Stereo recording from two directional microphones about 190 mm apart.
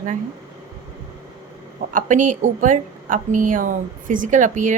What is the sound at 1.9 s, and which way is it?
A woman's voice, 40° right (ahead or behind).